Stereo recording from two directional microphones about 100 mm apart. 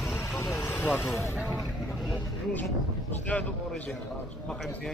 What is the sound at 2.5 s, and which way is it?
Speech, 15° left (ahead or behind).